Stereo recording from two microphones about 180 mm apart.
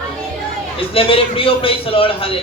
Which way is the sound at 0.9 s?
30° left (ahead or behind).